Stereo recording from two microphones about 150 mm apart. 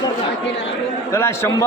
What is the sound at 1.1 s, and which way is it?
Speech, 20° left (ahead or behind).